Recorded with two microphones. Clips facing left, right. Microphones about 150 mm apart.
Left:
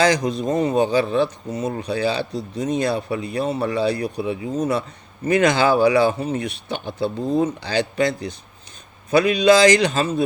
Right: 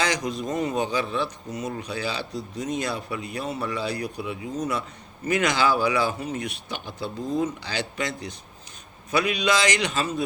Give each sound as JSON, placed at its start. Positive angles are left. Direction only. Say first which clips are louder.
{"t": 0.0, "sound": "speech", "louder": "left 8 dB", "side_deg": 30}